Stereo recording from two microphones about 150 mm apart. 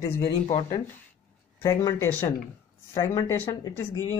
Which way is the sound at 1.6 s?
25° left (ahead or behind).